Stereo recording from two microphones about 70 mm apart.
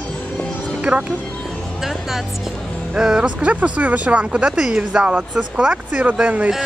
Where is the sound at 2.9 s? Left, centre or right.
Centre.